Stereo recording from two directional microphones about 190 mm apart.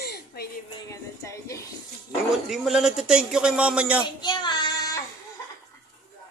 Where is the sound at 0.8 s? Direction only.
15° left (ahead or behind).